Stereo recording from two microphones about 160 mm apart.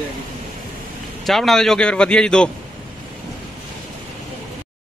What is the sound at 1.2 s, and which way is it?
Speech, centre (ahead or behind).